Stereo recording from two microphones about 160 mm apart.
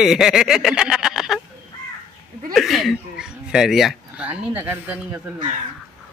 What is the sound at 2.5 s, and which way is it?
Speech, centre (ahead or behind).